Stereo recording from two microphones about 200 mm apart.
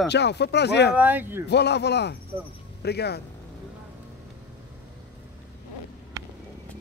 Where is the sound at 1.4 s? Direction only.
55° left (ahead or behind).